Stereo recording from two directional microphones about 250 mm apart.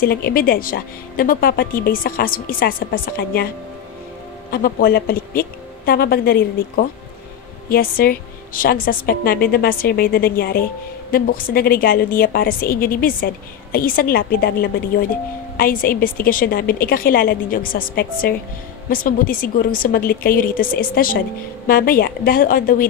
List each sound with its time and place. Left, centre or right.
0.0 s a woman's voice: left
4.5 s a woman's voice: left
7.7 s a woman's voice: left